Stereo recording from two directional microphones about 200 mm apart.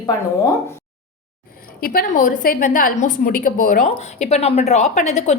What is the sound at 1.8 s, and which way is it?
A woman's voice, 45° left (ahead or behind).